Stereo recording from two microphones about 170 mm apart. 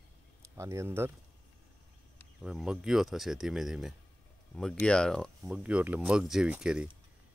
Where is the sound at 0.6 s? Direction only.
15° right (ahead or behind).